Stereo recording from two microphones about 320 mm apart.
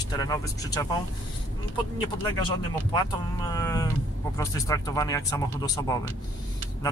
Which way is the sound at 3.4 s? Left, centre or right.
Centre.